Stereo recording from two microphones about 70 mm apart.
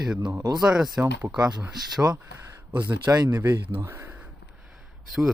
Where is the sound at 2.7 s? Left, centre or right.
Right.